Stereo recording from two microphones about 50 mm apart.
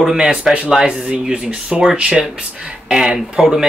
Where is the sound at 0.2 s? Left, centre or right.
Right.